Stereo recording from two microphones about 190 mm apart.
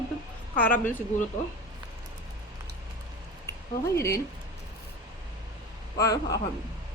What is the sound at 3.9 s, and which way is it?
Speech, 15° left (ahead or behind).